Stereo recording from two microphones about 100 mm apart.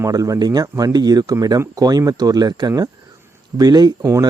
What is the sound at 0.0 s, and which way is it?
Speech, 35° right (ahead or behind).